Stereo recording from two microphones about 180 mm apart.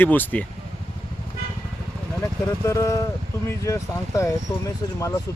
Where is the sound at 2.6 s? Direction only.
15° left (ahead or behind).